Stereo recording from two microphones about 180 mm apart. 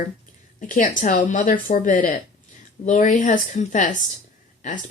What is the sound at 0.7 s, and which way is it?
Speech, 45° left (ahead or behind).